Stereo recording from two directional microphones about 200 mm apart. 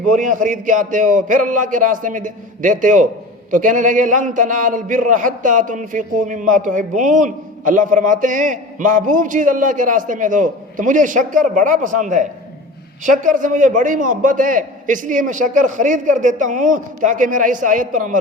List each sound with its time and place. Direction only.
0.1 s a man's voice: 40° right (ahead or behind)